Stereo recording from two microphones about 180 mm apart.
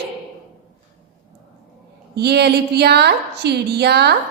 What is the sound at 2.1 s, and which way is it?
A woman's voice, 65° right (ahead or behind).